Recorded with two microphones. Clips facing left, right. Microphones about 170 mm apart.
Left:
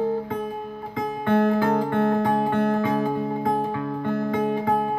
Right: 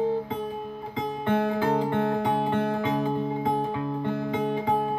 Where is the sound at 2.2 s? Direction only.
15° right (ahead or behind).